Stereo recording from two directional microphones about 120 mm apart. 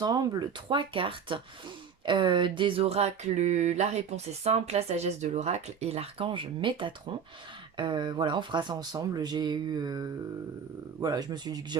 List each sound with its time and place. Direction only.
0.0 s speech: 30° right (ahead or behind)
2.0 s a sound: 45° right (ahead or behind)
7.8 s speech: 40° right (ahead or behind)